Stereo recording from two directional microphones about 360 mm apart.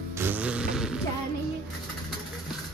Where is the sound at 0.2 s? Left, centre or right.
Centre.